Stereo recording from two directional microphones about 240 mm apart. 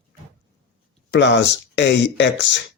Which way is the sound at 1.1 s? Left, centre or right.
Left.